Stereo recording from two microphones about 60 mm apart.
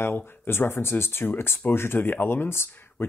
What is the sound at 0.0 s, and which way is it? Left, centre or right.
Speech, left.